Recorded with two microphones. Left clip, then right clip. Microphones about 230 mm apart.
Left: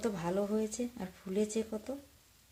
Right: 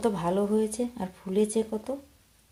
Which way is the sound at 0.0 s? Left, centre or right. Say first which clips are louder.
Right 8 dB; centre.